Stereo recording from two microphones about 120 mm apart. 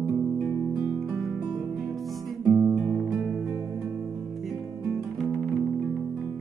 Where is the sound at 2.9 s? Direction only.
5° right (ahead or behind).